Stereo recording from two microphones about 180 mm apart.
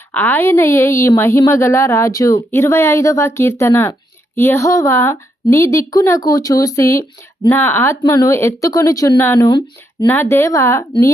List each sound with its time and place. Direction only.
0.1 s a woman's voice: 10° left (ahead or behind)
10.1 s a woman's voice: 10° left (ahead or behind)